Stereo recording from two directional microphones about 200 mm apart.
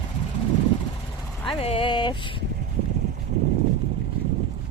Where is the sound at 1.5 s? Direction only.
30° left (ahead or behind).